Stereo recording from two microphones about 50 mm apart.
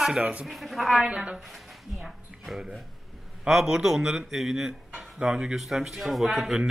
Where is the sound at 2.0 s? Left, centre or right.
Centre.